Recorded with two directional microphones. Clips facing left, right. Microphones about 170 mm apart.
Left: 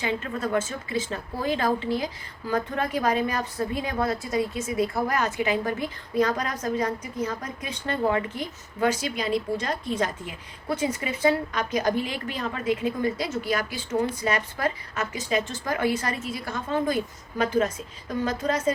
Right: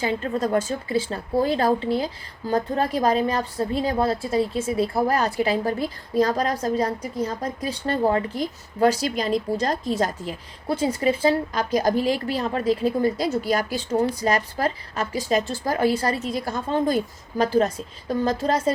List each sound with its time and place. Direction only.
0.0 s a woman's voice: 35° right (ahead or behind)